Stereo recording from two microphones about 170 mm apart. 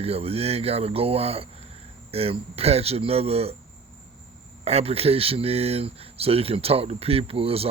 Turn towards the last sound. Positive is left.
turn(degrees=-35)  # may be behind; listen again after turning